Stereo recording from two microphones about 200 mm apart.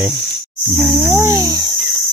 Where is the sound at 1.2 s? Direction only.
15° right (ahead or behind).